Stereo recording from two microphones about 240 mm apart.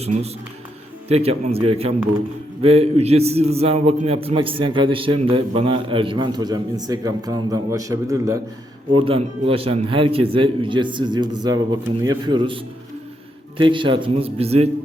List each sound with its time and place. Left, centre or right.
1.0 s a man's voice: right